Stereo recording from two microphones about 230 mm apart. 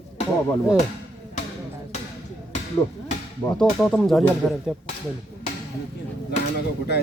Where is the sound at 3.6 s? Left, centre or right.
Centre.